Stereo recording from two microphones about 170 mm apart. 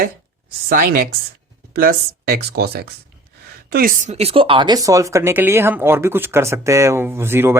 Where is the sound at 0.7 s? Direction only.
60° right (ahead or behind).